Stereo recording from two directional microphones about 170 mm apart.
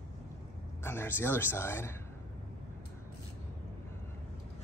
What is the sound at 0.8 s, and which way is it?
Speech, 15° left (ahead or behind).